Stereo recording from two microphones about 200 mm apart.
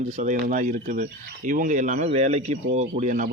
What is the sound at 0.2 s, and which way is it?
A man's voice, 40° right (ahead or behind).